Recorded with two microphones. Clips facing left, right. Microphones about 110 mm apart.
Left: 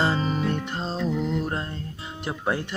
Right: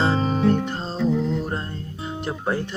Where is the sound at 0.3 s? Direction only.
30° right (ahead or behind).